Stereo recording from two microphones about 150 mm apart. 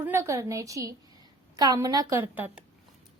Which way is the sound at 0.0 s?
15° right (ahead or behind).